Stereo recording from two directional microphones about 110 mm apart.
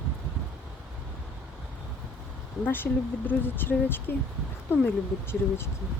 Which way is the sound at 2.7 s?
20° left (ahead or behind).